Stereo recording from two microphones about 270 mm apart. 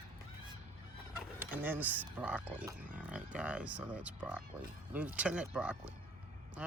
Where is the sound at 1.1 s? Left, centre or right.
Centre.